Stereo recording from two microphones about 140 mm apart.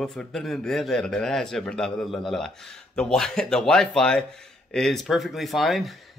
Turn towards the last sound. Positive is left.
turn(degrees=0)  # may be behind; listen again after turning